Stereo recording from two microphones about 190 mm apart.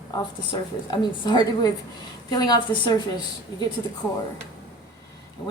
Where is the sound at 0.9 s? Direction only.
25° left (ahead or behind).